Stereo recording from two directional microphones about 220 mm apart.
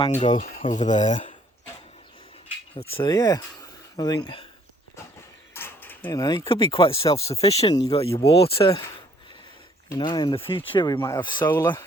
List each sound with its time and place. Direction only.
0.0 s speech: 30° left (ahead or behind)
0.6 s a sound: 35° left (ahead or behind)
2.9 s speech: 20° left (ahead or behind)
5.5 s speech: 10° left (ahead or behind); by 8.7 s 25° left (ahead or behind)
9.9 s speech: 20° left (ahead or behind)
11.4 s speech: 10° left (ahead or behind)